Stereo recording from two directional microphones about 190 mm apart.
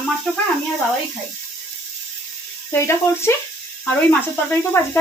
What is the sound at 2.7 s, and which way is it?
Speech, 15° left (ahead or behind).